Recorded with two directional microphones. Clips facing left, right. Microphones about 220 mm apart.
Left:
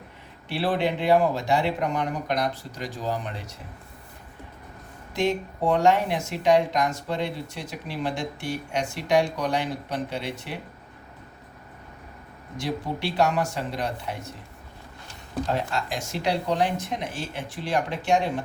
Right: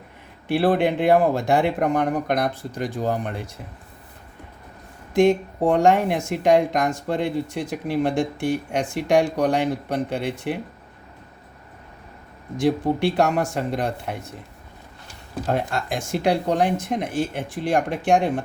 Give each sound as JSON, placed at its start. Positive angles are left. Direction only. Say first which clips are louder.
{"t": 0.4, "sound": "speech", "louder": "right 6 dB", "side_deg": -55}
{"t": 5.1, "sound": "speech", "louder": "right 8 dB", "side_deg": -50}
{"t": 12.5, "sound": "speech", "louder": "right 9 dB", "side_deg": -55}
{"t": 15.5, "sound": "speech", "louder": "right 3 dB", "side_deg": -55}